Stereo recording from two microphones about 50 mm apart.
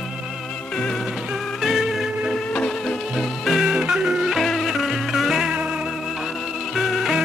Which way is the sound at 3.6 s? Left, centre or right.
Centre.